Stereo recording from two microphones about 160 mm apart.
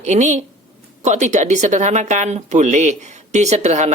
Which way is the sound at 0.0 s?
50° right (ahead or behind).